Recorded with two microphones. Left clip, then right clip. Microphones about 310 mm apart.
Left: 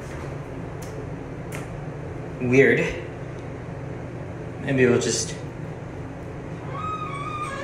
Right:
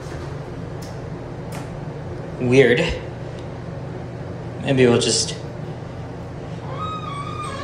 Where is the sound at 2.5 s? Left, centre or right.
Centre.